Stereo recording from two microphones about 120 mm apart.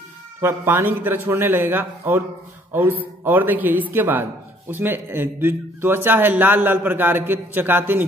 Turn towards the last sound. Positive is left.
turn(degrees=-15)  # may be behind; listen again after turning